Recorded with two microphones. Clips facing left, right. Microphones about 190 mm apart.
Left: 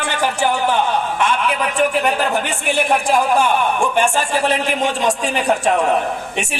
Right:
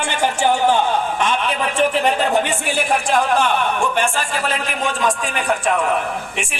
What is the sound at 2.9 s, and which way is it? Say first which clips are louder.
A man's voice: left 1 dB; 5° left (ahead or behind).